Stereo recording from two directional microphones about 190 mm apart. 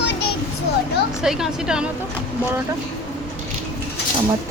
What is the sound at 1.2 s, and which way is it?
Speech, centre (ahead or behind).